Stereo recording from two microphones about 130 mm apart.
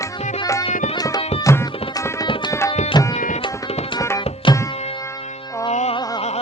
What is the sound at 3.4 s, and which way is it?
Tabla, 40° left (ahead or behind).